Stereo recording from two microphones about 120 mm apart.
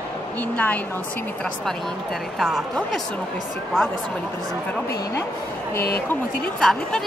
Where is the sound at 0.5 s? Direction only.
15° left (ahead or behind).